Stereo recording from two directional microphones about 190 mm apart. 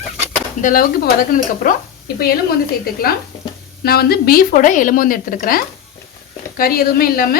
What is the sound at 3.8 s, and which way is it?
A woman's voice, 55° left (ahead or behind).